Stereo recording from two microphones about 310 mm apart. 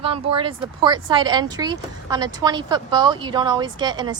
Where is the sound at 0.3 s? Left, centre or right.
Centre.